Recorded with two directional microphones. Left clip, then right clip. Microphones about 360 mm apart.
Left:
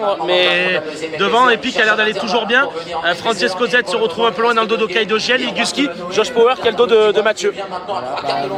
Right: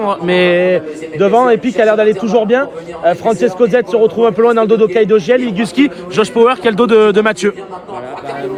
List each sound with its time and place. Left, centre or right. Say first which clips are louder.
0.1 s a man's voice: right 3 dB; centre
6.1 s a man's voice: right 3 dB; right